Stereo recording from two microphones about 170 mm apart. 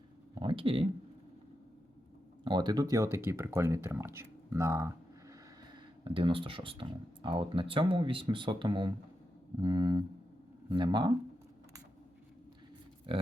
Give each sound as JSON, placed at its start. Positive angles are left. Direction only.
{"t": 0.3, "sound": "a sound", "side_deg": -30}
{"t": 2.4, "sound": "speech", "side_deg": -25}
{"t": 6.1, "sound": "speech", "side_deg": -30}
{"t": 13.1, "sound": "speech", "side_deg": -30}